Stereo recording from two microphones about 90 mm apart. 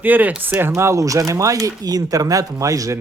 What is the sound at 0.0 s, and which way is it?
Speech, 20° right (ahead or behind).